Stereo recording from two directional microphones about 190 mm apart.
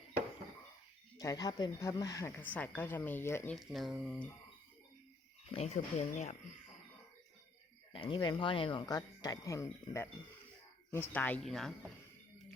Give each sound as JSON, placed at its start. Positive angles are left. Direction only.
{"t": 1.2, "sound": "speech", "side_deg": 20}
{"t": 3.5, "sound": "speech", "side_deg": 0}
{"t": 5.5, "sound": "speech", "side_deg": 35}
{"t": 7.9, "sound": "speech", "side_deg": 25}